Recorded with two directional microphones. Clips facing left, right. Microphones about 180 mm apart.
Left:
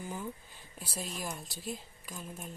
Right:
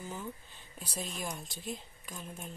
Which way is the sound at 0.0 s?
10° left (ahead or behind).